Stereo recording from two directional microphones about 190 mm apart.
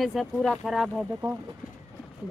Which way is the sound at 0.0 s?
Centre (ahead or behind).